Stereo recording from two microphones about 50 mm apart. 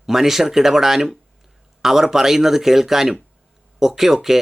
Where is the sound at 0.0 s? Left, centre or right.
Centre.